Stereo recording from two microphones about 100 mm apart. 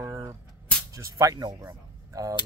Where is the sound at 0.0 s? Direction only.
35° right (ahead or behind).